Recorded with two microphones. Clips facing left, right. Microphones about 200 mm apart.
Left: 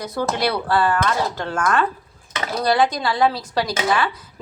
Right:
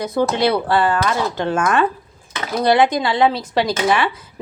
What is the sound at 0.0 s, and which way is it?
Speech, 20° right (ahead or behind).